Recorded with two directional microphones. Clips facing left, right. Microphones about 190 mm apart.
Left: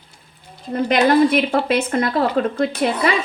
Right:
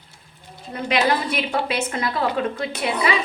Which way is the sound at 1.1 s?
50° left (ahead or behind).